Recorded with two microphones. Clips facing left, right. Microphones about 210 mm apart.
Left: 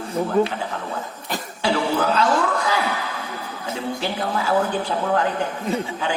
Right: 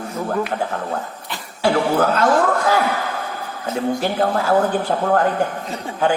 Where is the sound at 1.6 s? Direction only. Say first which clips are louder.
Right 4 dB; 50° right (ahead or behind).